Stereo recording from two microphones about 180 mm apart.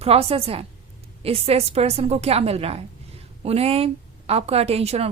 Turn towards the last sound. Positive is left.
turn(degrees=-35)  # may be behind; listen again after turning